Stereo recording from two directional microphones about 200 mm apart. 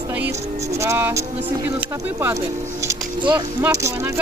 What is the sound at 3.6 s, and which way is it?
Speech, 15° right (ahead or behind).